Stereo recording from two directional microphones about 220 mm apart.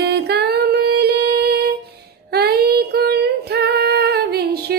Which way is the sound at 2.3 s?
45° right (ahead or behind).